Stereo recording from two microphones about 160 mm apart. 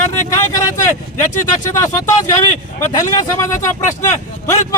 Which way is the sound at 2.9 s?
25° left (ahead or behind).